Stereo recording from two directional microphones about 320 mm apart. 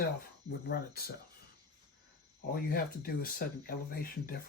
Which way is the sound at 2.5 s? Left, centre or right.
Left.